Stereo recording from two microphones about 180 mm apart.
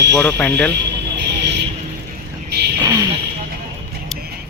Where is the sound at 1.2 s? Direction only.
75° right (ahead or behind).